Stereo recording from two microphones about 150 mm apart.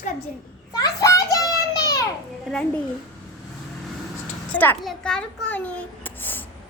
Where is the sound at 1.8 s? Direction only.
25° left (ahead or behind).